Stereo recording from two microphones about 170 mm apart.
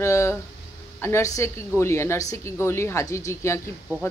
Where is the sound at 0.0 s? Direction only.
15° left (ahead or behind).